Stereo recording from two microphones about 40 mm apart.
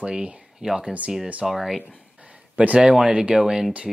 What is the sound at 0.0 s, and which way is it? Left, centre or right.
Speech, right.